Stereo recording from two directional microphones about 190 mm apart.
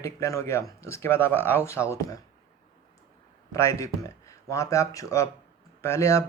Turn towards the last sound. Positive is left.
turn(degrees=15)  # may be behind; listen again after turning